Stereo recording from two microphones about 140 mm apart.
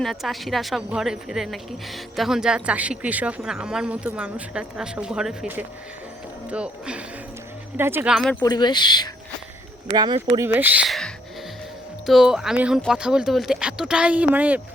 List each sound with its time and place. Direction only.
0.0 s speech: centre (ahead or behind); by 8.1 s 15° right (ahead or behind)
8.1 s speech: centre (ahead or behind)
8.4 s speech: 30° left (ahead or behind)
9.9 s speech: 30° right (ahead or behind)
10.3 s speech: 15° right (ahead or behind)
10.8 s music: centre (ahead or behind)
12.0 s speech: 5° right (ahead or behind)